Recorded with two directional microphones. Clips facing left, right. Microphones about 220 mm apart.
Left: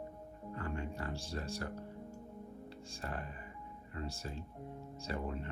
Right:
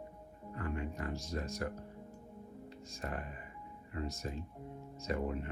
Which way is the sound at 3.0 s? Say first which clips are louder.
Right 2 dB; 30° left (ahead or behind).